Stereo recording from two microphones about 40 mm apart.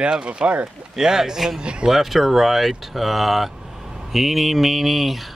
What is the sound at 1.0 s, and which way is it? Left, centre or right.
Speech, centre.